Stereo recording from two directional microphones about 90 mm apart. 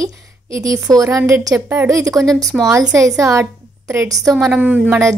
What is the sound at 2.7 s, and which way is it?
A woman's voice, 40° right (ahead or behind).